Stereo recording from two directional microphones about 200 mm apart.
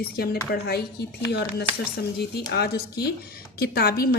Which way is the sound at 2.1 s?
55° left (ahead or behind).